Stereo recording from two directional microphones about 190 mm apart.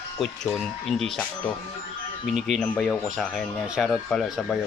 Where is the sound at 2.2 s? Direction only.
Centre (ahead or behind).